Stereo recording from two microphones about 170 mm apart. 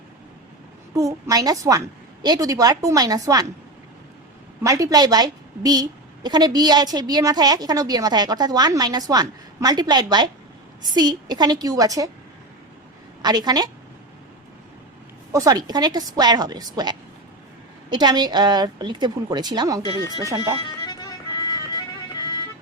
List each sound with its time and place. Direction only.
0.9 s a woman's voice: 20° right (ahead or behind)
4.6 s a woman's voice: 20° right (ahead or behind)
13.2 s a woman's voice: 25° right (ahead or behind)
15.3 s a woman's voice: 20° right (ahead or behind)
19.8 s speech: 20° left (ahead or behind)
20.2 s a woman's voice: 20° right (ahead or behind)
20.6 s music: 25° left (ahead or behind)